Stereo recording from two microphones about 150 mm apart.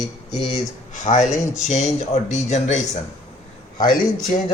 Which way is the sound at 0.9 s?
55° left (ahead or behind).